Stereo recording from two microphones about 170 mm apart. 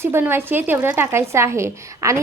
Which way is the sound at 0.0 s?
15° right (ahead or behind).